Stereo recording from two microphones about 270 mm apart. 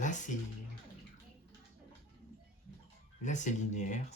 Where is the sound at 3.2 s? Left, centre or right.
Left.